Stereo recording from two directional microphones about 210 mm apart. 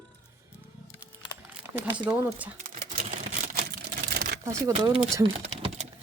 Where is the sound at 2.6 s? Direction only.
35° right (ahead or behind).